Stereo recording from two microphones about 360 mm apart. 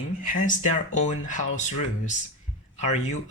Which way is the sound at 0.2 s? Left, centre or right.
Left.